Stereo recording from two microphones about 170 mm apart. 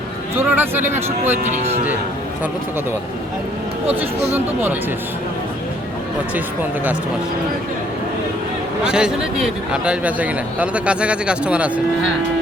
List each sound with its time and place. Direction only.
0.3 s a man's voice: 10° right (ahead or behind)
1.5 s speech: 40° right (ahead or behind)
4.4 s a man's voice: 10° right (ahead or behind)
6.3 s a man's voice: 10° right (ahead or behind)
8.8 s a man's voice: 5° right (ahead or behind)